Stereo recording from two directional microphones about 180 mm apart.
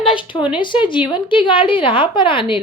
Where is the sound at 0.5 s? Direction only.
25° left (ahead or behind).